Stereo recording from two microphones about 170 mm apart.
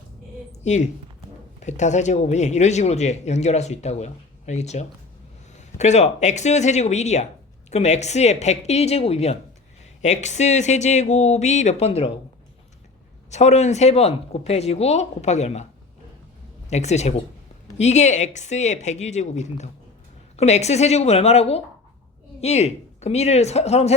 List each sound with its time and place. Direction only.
0.6 s a woman's voice: 45° left (ahead or behind)
13.3 s speech: 40° left (ahead or behind)
16.6 s speech: 40° left (ahead or behind)